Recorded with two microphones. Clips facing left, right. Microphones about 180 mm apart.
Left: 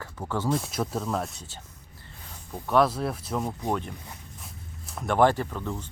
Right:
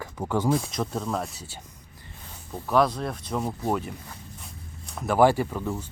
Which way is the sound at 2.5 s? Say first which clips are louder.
Even; centre (ahead or behind).